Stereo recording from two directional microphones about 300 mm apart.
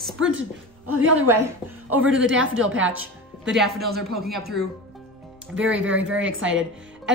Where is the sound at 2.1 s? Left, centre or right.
Right.